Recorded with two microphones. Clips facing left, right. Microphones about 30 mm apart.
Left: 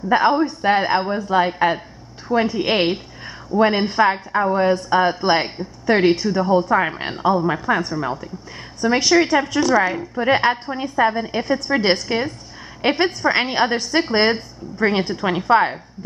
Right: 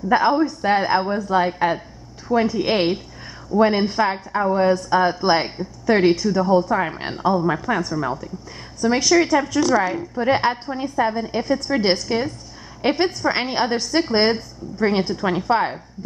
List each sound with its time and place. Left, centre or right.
0.1 s a woman's voice: centre